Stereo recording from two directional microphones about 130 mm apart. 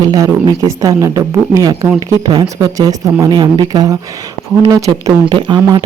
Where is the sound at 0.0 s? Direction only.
25° right (ahead or behind).